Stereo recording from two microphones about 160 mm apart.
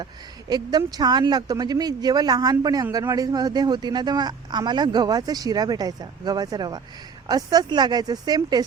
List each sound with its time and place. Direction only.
0.0 s speech: 25° right (ahead or behind)